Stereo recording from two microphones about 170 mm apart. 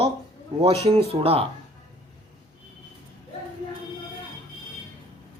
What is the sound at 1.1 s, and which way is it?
Speech, 35° right (ahead or behind).